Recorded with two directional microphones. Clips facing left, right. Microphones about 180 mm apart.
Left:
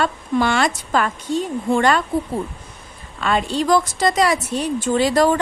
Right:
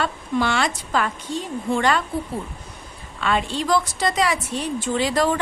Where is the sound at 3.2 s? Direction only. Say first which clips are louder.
Left 3 dB; 40° left (ahead or behind).